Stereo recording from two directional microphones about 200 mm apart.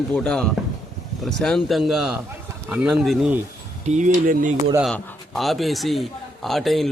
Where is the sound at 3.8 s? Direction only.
35° right (ahead or behind).